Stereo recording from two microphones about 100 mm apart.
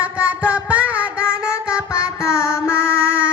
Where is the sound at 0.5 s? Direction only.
15° right (ahead or behind).